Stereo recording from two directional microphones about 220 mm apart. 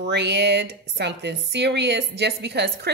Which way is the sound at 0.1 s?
50° right (ahead or behind).